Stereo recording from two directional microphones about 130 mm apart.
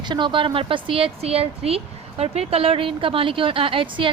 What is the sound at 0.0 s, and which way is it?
Speech, 35° right (ahead or behind).